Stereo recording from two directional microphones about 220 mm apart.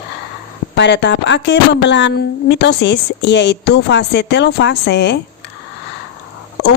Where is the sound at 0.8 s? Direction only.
50° left (ahead or behind).